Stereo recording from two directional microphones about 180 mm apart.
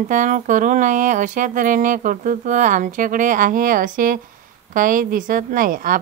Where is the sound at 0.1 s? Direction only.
45° right (ahead or behind).